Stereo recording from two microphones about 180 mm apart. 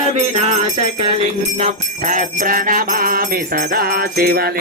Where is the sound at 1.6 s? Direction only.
45° right (ahead or behind).